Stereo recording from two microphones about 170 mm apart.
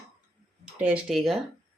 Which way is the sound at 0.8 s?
5° right (ahead or behind).